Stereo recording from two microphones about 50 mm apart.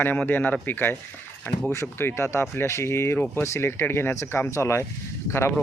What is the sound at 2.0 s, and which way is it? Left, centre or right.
Speech, left.